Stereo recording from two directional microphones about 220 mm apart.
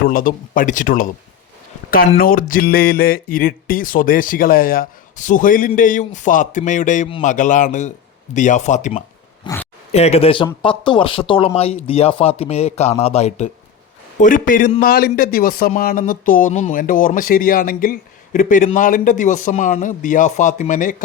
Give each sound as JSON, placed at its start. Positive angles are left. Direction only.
{"t": 0.0, "sound": "speech", "side_deg": 40}
{"t": 2.1, "sound": "speech", "side_deg": 40}
{"t": 9.4, "sound": "speech", "side_deg": 15}
{"t": 9.9, "sound": "speech", "side_deg": 30}